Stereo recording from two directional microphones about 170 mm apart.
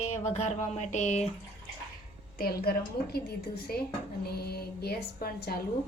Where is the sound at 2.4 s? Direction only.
65° left (ahead or behind).